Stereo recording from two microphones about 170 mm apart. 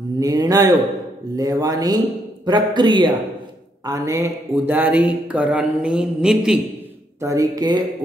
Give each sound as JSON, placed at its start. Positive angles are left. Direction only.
{"t": 0.2, "sound": "a man's voice", "side_deg": -20}
{"t": 7.2, "sound": "a man's voice", "side_deg": -20}